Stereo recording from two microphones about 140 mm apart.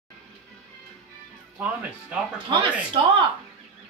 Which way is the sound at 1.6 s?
10° right (ahead or behind).